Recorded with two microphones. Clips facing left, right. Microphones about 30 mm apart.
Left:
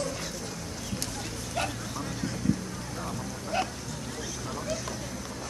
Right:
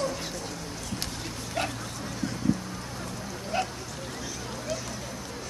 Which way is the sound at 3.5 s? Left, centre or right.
Centre.